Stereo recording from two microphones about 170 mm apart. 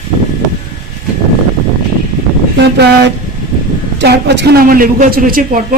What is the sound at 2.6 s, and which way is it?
A man's voice, 80° right.